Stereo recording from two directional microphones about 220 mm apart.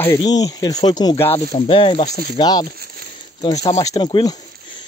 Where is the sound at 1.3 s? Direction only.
25° left (ahead or behind).